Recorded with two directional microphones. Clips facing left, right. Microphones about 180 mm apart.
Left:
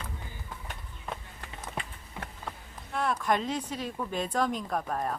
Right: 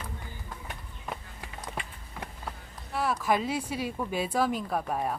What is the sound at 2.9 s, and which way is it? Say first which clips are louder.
Speech: right 1 dB; 5° right (ahead or behind).